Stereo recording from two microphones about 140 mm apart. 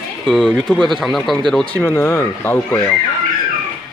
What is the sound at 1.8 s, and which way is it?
Speech, 15° left (ahead or behind).